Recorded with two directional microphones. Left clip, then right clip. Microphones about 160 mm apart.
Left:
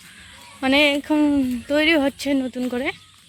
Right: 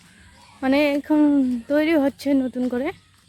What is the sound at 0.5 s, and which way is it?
Speech, 15° right (ahead or behind).